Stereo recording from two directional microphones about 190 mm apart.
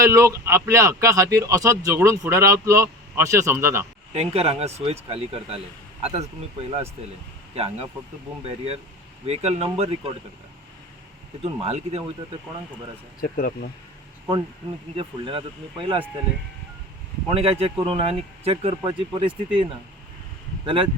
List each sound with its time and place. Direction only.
0.0 s a man's voice: 15° right (ahead or behind)
4.1 s speech: 30° right (ahead or behind)
11.4 s speech: 30° right (ahead or behind)
13.2 s speech: 50° left (ahead or behind)
14.9 s speech: 25° right (ahead or behind)
17.2 s speech: 30° right (ahead or behind)